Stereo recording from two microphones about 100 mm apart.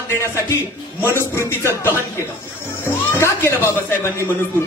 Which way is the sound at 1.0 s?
25° left (ahead or behind).